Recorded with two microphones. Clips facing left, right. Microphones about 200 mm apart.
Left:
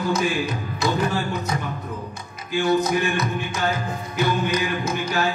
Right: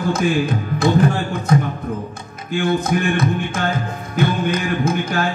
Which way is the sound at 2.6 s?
50° right (ahead or behind).